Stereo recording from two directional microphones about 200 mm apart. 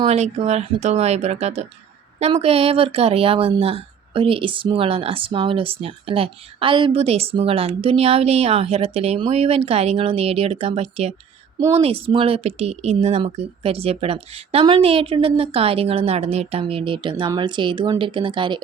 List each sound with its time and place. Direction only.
0.0 s speech: 35° right (ahead or behind)